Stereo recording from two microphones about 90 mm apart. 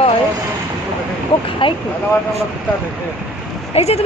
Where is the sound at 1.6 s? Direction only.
70° left (ahead or behind).